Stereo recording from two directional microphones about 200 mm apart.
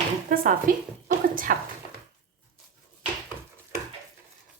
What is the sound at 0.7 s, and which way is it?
Speech, 45° right (ahead or behind).